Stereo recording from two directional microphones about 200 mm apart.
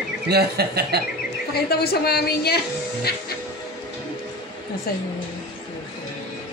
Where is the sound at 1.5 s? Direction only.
50° left (ahead or behind).